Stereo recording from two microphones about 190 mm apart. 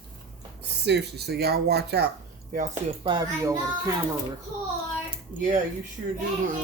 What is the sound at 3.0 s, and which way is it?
Speech, 20° right (ahead or behind).